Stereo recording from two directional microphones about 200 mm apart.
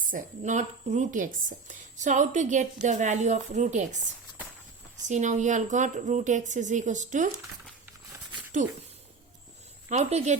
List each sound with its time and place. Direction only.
0.1 s a woman's voice: 40° right (ahead or behind)
5.0 s a woman's voice: 35° right (ahead or behind)
9.9 s a woman's voice: 35° right (ahead or behind)